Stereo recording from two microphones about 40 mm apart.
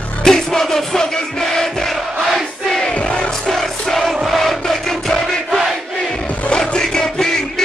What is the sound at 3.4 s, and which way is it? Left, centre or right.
Music, centre.